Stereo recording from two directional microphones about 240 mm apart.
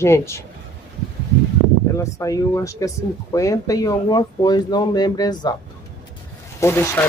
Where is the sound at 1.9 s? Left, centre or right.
Centre.